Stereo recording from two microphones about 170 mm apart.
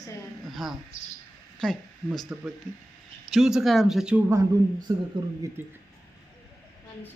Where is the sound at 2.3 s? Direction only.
10° right (ahead or behind).